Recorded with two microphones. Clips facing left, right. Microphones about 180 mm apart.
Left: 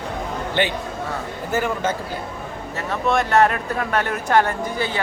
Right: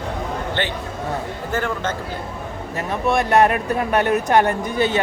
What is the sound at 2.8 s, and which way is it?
Speech, 15° right (ahead or behind).